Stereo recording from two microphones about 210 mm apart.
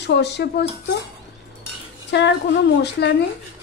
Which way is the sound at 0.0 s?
55° left (ahead or behind).